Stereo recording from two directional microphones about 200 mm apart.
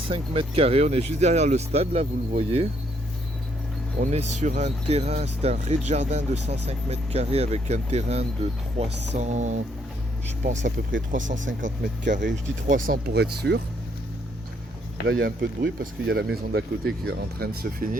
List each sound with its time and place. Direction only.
0.1 s speech: 30° right (ahead or behind)
4.0 s speech: 35° right (ahead or behind)
10.5 s speech: 65° right (ahead or behind)
11.6 s speech: 40° right (ahead or behind); by 13.6 s 55° right (ahead or behind)
15.0 s speech: 50° right (ahead or behind)